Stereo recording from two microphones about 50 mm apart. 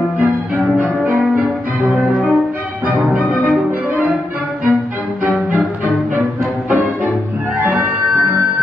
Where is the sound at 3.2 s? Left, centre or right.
Left.